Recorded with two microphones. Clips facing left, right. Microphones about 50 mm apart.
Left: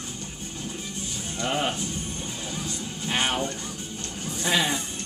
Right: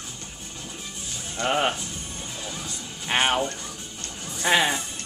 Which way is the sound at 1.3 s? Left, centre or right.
Right.